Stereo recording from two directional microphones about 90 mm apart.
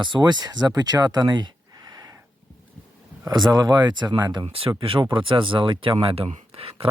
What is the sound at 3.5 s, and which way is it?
Speech, 50° right (ahead or behind).